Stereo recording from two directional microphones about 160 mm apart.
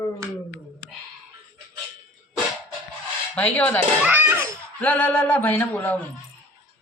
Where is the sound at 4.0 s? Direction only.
10° right (ahead or behind).